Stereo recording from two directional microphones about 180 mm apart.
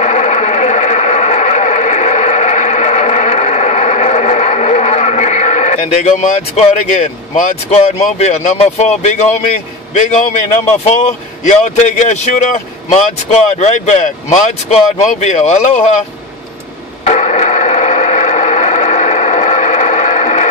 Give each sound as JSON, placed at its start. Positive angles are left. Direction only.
{"t": 0.0, "sound": "radio", "side_deg": 40}
{"t": 9.9, "sound": "speech", "side_deg": 40}
{"t": 17.0, "sound": "a sound", "side_deg": 40}